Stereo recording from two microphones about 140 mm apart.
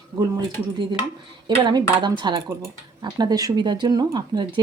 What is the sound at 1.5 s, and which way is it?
Speech, 35° right (ahead or behind).